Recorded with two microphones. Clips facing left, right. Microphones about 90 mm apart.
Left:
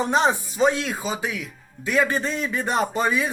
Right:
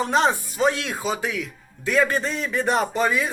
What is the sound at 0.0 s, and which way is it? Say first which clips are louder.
Speech: even; 15° left (ahead or behind).